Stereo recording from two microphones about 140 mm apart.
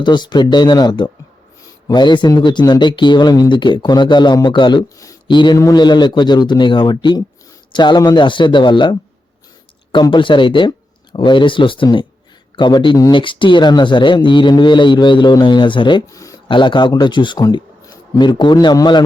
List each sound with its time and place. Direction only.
0.0 s speech: 30° left (ahead or behind)
16.5 s speech: 35° left (ahead or behind)